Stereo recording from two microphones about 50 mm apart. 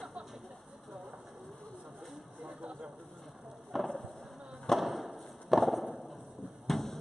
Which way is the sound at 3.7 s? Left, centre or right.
Centre.